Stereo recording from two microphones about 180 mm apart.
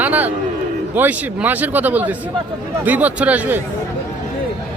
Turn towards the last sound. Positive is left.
turn(degrees=-10)  # may be behind; listen again after turning